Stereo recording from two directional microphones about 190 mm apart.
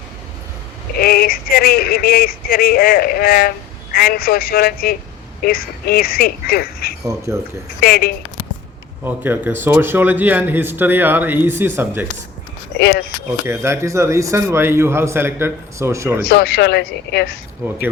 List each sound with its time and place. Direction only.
0.9 s speech: 50° left (ahead or behind)
9.0 s a man's voice: 10° right (ahead or behind)
12.8 s speech: 60° left (ahead or behind)
13.4 s a man's voice: 15° right (ahead or behind)
16.3 s speech: 60° left (ahead or behind)